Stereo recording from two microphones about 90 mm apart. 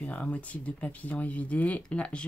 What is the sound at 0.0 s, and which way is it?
Speech, 15° left (ahead or behind).